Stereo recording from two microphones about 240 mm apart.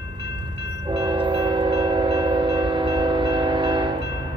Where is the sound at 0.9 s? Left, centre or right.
Centre.